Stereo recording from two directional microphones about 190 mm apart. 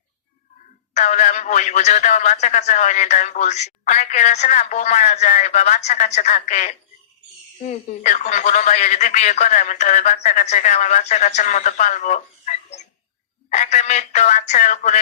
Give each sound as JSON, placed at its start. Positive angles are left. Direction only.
{"t": 0.9, "sound": "a man's voice", "side_deg": 40}